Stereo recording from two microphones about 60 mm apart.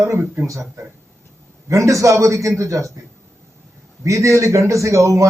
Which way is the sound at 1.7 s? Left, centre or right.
Right.